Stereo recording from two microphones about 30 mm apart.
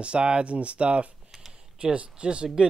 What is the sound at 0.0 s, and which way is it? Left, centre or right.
Speech, right.